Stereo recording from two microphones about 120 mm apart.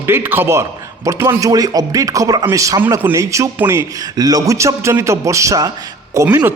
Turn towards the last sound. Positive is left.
turn(degrees=-20)  # may be behind; listen again after turning